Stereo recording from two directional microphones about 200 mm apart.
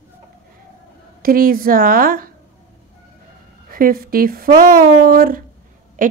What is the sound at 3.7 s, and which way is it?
A woman's voice, 45° right (ahead or behind).